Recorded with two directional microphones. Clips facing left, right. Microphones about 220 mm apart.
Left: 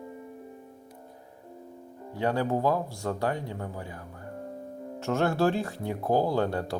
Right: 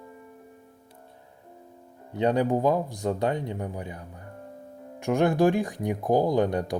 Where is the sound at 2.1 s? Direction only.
20° right (ahead or behind).